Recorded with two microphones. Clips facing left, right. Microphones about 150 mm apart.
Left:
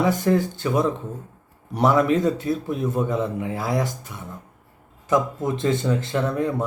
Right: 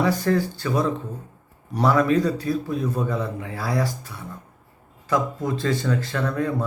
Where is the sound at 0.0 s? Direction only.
20° left (ahead or behind).